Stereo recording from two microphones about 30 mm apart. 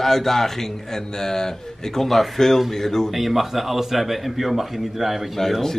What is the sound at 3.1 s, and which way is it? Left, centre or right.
A man's voice, centre.